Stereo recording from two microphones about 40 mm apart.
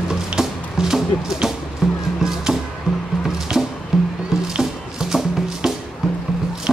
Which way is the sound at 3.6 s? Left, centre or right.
Centre.